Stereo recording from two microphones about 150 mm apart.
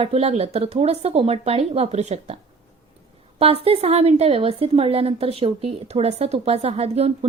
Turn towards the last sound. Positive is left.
turn(degrees=-45)  # may be behind; listen again after turning